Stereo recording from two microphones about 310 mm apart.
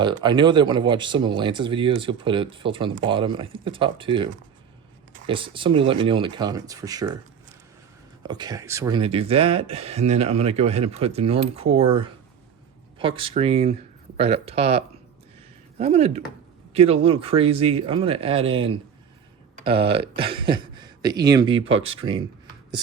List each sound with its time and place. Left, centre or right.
0.0 s speech: centre
8.2 s speech: centre